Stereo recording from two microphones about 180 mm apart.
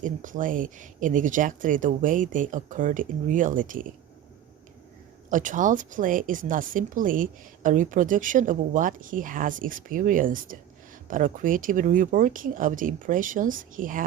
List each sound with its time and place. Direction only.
0.0 s a woman's voice: 45° right (ahead or behind)
5.3 s a woman's voice: 45° right (ahead or behind)